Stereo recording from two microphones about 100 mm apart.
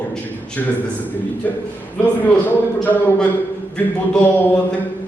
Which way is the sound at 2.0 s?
15° left (ahead or behind).